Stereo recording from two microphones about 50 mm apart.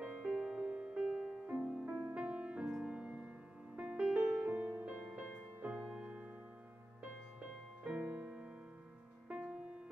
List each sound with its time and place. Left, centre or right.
0.0 s music: right
2.1 s music: right
4.5 s music: right
7.8 s music: right